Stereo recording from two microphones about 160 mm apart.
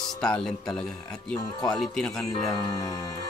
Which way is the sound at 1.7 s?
5° left (ahead or behind).